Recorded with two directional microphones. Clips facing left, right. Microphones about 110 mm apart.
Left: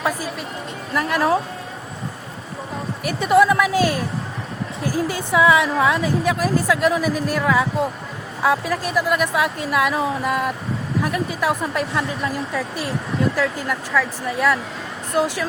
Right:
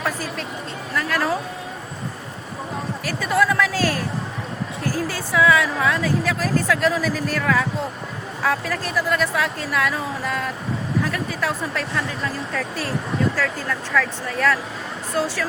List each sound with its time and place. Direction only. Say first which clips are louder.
0.0 s a sound: left 2 dB; 10° left (ahead or behind)
0.9 s speech: left 4 dB; 20° left (ahead or behind)
3.0 s a woman's voice: left 6 dB; 20° left (ahead or behind)